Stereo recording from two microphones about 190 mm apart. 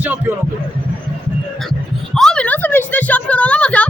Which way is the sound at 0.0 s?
10° right (ahead or behind).